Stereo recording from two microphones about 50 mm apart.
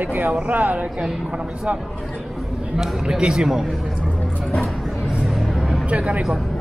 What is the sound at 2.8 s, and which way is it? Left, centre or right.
Speech, centre.